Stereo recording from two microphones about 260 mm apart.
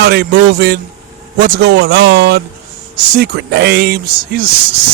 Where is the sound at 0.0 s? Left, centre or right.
Right.